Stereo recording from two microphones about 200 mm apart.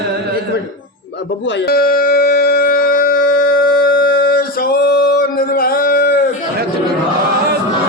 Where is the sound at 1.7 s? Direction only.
50° left (ahead or behind).